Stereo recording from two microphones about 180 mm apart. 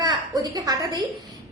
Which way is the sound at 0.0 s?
20° right (ahead or behind).